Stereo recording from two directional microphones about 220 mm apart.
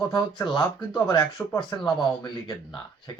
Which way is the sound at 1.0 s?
20° left (ahead or behind).